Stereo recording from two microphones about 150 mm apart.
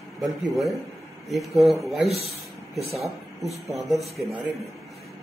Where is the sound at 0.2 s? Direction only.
Centre (ahead or behind).